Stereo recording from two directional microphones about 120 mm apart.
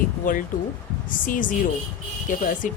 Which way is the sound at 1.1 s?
90° left.